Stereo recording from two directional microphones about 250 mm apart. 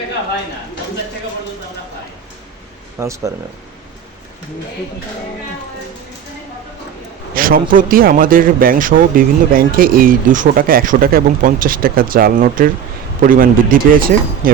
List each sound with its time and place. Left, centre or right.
3.0 s speech: centre
7.3 s speech: right